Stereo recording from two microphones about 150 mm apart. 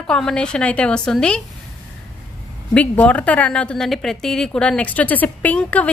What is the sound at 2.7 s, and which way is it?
A woman's voice, 10° left (ahead or behind).